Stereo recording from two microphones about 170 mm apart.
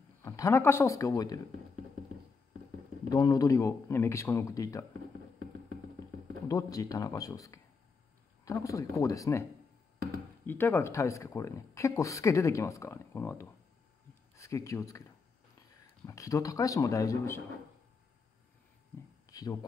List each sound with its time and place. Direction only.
0.2 s a man's voice: 15° left (ahead or behind)
3.1 s speech: 20° left (ahead or behind)
6.4 s speech: 20° left (ahead or behind)
14.3 s a sound: 15° left (ahead or behind)
16.1 s speech: 20° left (ahead or behind)
19.3 s a sound: 20° left (ahead or behind)